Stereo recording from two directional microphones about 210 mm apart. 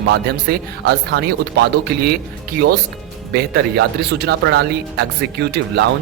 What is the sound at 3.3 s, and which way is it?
Speech, 50° right (ahead or behind).